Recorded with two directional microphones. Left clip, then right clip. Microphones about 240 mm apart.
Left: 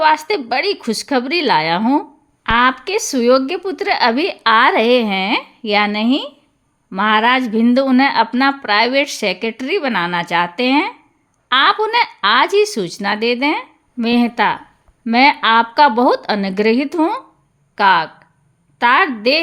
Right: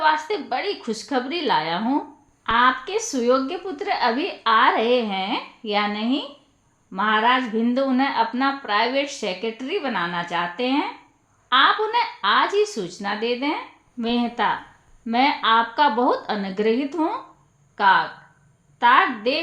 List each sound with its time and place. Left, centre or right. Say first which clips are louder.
0.0 s a woman's voice: left 6 dB; left